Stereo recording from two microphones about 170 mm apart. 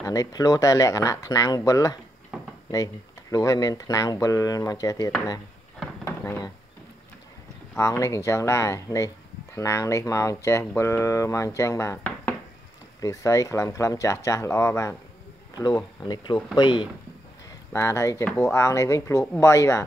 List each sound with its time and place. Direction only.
0.0 s speech: 20° left (ahead or behind)
6.0 s a sound: 15° left (ahead or behind)
7.7 s speech: 15° left (ahead or behind)
17.7 s speech: 15° left (ahead or behind)